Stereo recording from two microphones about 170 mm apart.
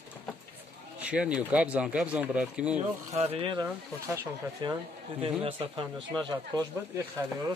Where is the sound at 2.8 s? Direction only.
40° right (ahead or behind); by 7.3 s 20° right (ahead or behind).